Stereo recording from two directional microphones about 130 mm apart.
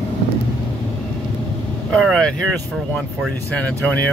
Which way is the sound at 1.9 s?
5° left (ahead or behind).